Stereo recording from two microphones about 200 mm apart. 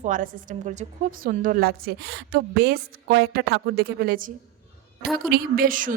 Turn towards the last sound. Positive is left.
turn(degrees=-45)  # may be behind; listen again after turning